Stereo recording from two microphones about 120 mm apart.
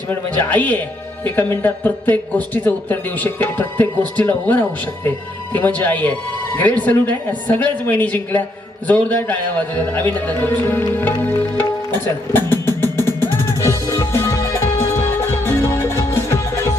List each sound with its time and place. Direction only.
0.1 s speech: 15° left (ahead or behind)
11.5 s music: 15° left (ahead or behind)